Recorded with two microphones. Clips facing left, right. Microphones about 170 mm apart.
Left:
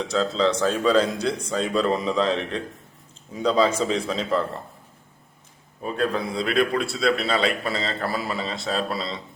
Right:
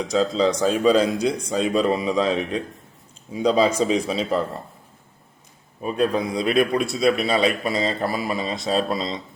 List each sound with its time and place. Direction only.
0.0 s a man's voice: 10° right (ahead or behind)
5.8 s a man's voice: 15° right (ahead or behind)